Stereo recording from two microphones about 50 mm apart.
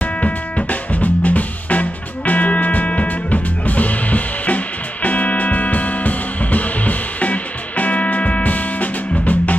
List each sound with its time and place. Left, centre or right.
0.0 s music: left